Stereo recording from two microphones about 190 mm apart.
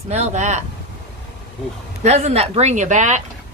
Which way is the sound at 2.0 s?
35° right (ahead or behind).